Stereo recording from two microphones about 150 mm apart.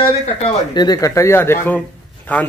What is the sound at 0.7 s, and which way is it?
Speech, 25° left (ahead or behind).